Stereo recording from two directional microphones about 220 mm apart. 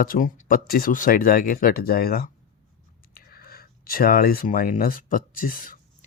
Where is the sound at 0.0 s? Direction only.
40° left (ahead or behind).